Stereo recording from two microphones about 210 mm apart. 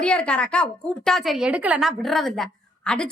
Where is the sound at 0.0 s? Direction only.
5° left (ahead or behind).